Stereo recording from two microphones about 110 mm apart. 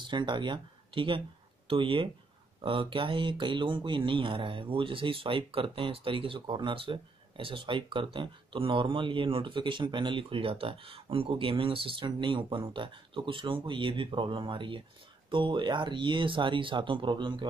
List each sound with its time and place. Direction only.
0.0 s speech: 45° right (ahead or behind)